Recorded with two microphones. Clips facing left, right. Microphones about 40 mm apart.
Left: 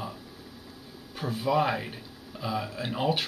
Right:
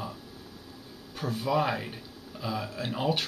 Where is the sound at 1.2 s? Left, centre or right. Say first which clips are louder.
Left 2 dB; centre.